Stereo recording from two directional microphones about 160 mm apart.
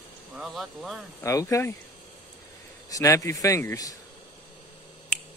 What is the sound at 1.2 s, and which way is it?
Speech, 20° left (ahead or behind).